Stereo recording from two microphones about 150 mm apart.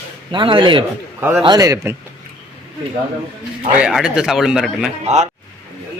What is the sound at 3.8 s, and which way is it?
Speech, 5° right (ahead or behind).